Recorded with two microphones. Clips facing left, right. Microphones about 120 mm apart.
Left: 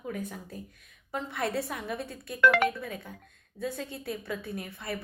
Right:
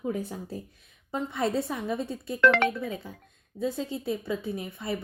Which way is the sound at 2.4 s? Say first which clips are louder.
Right 1 dB; 5° left (ahead or behind).